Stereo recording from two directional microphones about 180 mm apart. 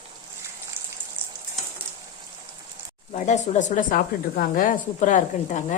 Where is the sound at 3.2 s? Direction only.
40° left (ahead or behind).